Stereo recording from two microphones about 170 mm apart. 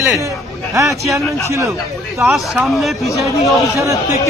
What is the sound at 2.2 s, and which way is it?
Speech, centre (ahead or behind).